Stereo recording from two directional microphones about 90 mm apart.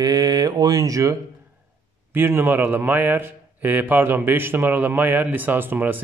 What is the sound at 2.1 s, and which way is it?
A man's voice, 25° right (ahead or behind).